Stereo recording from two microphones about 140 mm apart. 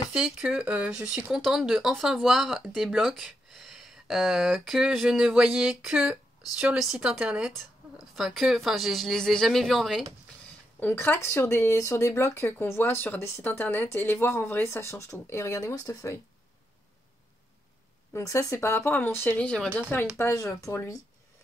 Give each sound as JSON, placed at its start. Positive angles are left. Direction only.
{"t": 0.1, "sound": "speech", "side_deg": -5}
{"t": 10.8, "sound": "speech", "side_deg": 15}
{"t": 18.1, "sound": "speech", "side_deg": 20}